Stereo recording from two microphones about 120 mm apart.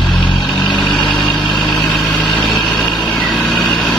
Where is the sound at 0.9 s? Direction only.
40° left (ahead or behind).